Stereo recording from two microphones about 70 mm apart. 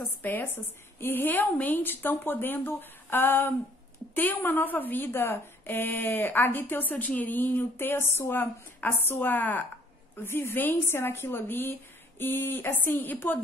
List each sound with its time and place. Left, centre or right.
0.2 s a woman's voice: left